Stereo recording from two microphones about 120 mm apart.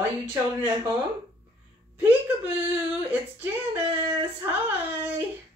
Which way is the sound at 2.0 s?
15° right (ahead or behind).